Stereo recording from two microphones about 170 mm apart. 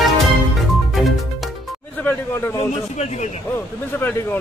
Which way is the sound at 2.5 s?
40° left (ahead or behind).